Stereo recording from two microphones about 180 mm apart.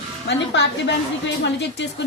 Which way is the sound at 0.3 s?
75° left (ahead or behind).